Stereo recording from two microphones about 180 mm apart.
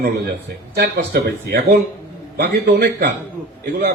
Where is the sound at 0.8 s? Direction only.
60° right (ahead or behind).